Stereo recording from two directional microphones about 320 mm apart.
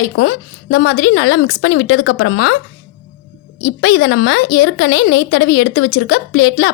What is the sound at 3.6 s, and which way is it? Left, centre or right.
A woman's voice, left.